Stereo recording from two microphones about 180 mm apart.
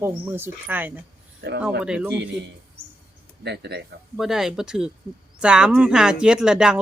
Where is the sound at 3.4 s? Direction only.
65° right (ahead or behind).